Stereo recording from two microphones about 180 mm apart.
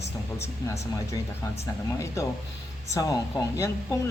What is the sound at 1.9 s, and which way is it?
A man's voice, 20° left (ahead or behind).